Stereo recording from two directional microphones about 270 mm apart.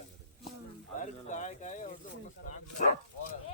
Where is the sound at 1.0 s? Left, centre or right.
Left.